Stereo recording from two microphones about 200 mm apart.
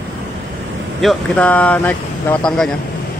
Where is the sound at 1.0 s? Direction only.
5° left (ahead or behind).